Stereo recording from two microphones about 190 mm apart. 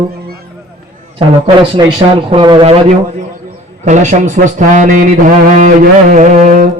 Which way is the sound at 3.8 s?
40° right (ahead or behind).